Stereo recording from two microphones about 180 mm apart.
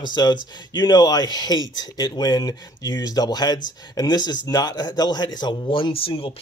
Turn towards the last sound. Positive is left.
turn(degrees=30)  # may be behind; listen again after turning